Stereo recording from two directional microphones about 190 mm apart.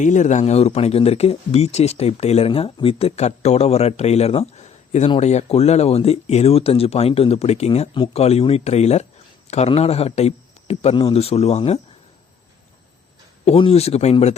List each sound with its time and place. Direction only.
0.0 s a man's voice: 40° left (ahead or behind)
13.4 s a man's voice: 30° left (ahead or behind)